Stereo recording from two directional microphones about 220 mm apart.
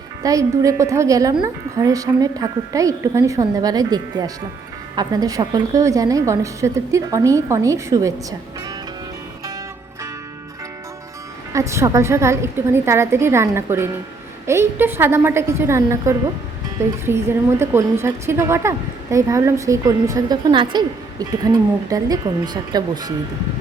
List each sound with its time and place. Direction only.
0.2 s a woman's voice: 15° right (ahead or behind)
11.5 s a woman's voice: 15° right (ahead or behind)